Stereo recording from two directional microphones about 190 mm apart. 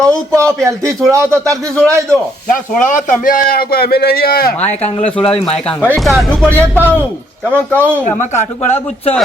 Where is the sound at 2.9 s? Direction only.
45° left (ahead or behind).